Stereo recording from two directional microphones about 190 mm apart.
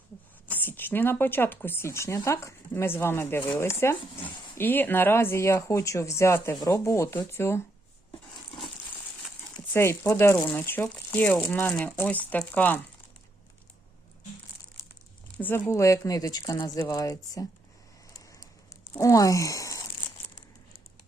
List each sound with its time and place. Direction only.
0.4 s speech: 10° left (ahead or behind)
9.7 s speech: 10° left (ahead or behind)
14.8 s crumpling: 15° left (ahead or behind)
15.4 s speech: 10° left (ahead or behind)
18.2 s a sound: 15° left (ahead or behind)
18.9 s speech: 15° left (ahead or behind)